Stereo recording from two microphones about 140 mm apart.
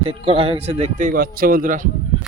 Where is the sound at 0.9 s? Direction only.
80° right.